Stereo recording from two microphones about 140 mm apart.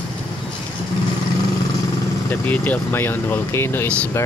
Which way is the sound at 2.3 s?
15° left (ahead or behind).